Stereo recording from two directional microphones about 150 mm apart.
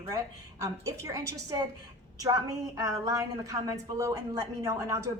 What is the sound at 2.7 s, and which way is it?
A woman's voice, 20° right (ahead or behind).